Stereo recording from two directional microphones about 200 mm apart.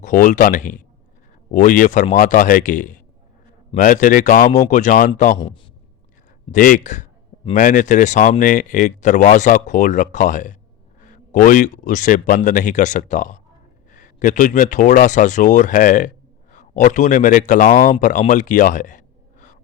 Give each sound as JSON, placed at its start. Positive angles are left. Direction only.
{"t": 0.0, "sound": "speech", "side_deg": 40}
{"t": 6.5, "sound": "speech", "side_deg": 40}